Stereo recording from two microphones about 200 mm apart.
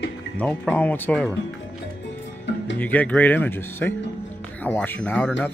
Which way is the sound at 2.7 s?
10° left (ahead or behind).